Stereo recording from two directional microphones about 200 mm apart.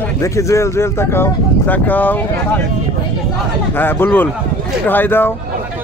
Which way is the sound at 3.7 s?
10° left (ahead or behind).